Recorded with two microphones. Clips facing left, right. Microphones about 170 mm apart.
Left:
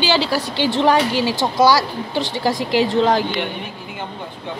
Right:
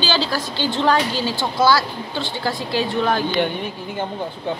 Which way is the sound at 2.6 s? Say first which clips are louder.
Left 5 dB; 90° left.